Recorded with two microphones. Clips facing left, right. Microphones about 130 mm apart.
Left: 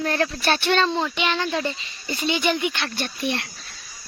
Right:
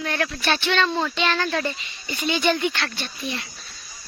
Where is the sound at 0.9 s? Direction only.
15° left (ahead or behind).